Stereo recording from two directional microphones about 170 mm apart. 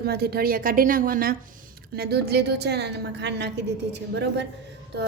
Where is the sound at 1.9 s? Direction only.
70° right (ahead or behind).